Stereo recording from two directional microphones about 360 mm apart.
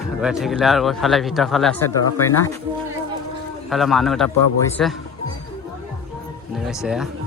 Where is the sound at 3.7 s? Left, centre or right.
Centre.